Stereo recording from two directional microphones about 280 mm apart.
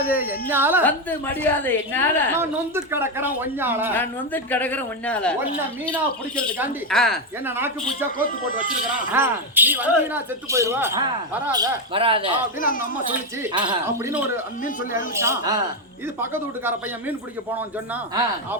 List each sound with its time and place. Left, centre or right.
0.3 s speech: centre
0.9 s a woman's voice: centre
2.4 s speech: centre
3.9 s a woman's voice: centre
8.2 s speech: left
9.1 s speech: centre
12.5 s speech: left
13.4 s speech: centre
15.2 s speech: centre